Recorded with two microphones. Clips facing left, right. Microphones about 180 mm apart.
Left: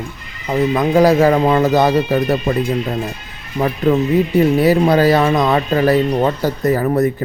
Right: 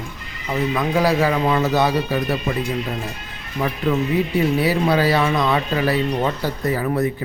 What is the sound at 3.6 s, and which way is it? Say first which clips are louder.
Speech: left 5 dB; 50° left (ahead or behind).